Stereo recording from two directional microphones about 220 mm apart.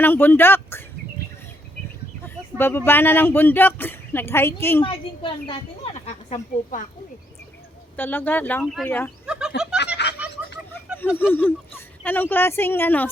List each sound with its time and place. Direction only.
0.0 s speech: 10° left (ahead or behind)
2.2 s speech: 10° left (ahead or behind)
4.8 s a woman's voice: 25° left (ahead or behind)
7.9 s speech: 10° left (ahead or behind)
9.2 s a sound: 5° right (ahead or behind)
10.0 s a sound: 50° left (ahead or behind)
11.2 s speech: 10° left (ahead or behind)